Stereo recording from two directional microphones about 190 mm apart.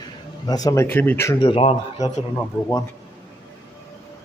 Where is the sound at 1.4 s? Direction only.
30° left (ahead or behind).